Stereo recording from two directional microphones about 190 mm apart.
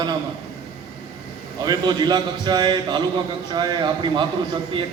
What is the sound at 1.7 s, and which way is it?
A man's voice, 20° right (ahead or behind).